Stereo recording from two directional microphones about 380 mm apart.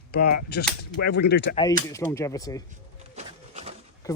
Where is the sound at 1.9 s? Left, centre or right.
Centre.